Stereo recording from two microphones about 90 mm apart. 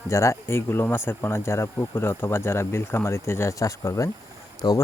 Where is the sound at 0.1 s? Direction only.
35° left (ahead or behind).